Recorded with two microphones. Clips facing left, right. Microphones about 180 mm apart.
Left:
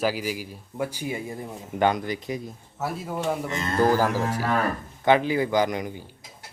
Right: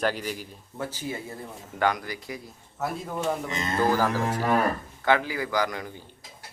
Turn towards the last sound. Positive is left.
turn(degrees=20)  # may be behind; listen again after turning